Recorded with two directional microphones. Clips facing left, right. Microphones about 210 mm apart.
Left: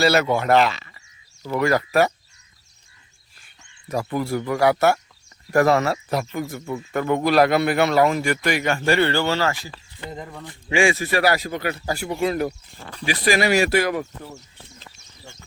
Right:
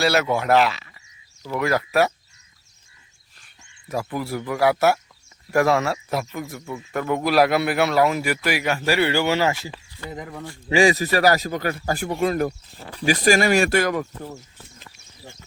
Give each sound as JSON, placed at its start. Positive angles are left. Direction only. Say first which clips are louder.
{"t": 0.0, "sound": "a man's voice", "louder": "left 2 dB", "side_deg": 0}
{"t": 3.4, "sound": "a man's voice", "louder": "left 2 dB", "side_deg": 0}
{"t": 10.1, "sound": "speech", "louder": "right 1 dB", "side_deg": -10}
{"t": 10.7, "sound": "speech", "louder": "right 2 dB", "side_deg": -40}